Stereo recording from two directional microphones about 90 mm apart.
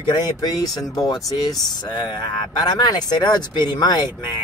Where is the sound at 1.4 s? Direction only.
55° left (ahead or behind).